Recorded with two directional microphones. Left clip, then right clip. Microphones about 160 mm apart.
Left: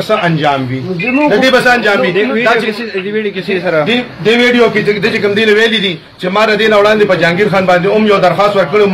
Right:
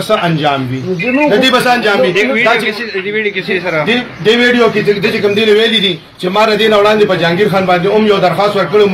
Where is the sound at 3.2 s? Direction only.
65° left (ahead or behind).